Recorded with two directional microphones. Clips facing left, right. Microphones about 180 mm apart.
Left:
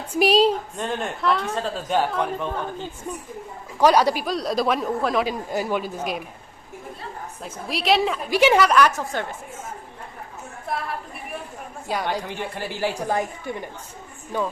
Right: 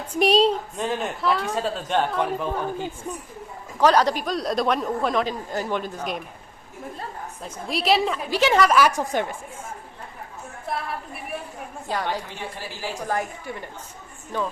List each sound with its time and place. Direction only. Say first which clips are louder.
0.1 s speech: left 1 dB; 5° left (ahead or behind)
3.8 s a man's voice: left 1 dB; 10° left (ahead or behind)
7.4 s speech: even; centre (ahead or behind)
8.3 s a man's voice: left 3 dB; 15° left (ahead or behind)
8.6 s speech: even; 5° right (ahead or behind)
9.1 s speech: right 3 dB; 15° right (ahead or behind)
10.7 s a woman's voice: left 1 dB; centre (ahead or behind)
11.9 s a man's voice: left 1 dB; 10° left (ahead or behind)
12.3 s speech: left 5 dB; 60° left (ahead or behind)
13.1 s a woman's voice: left 2 dB; 20° left (ahead or behind)